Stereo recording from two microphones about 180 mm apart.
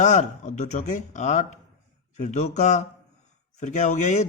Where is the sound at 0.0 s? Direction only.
40° left (ahead or behind).